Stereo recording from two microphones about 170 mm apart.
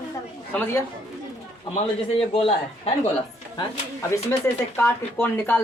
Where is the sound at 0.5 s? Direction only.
10° left (ahead or behind).